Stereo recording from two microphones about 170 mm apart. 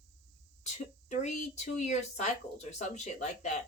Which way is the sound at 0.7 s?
45° left (ahead or behind).